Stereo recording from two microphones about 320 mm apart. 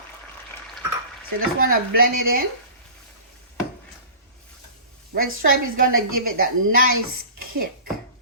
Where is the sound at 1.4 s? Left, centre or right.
Right.